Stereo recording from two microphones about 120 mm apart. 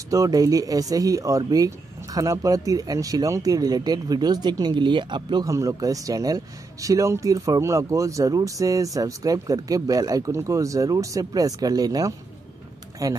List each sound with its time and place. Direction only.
0.1 s speech: 30° right (ahead or behind)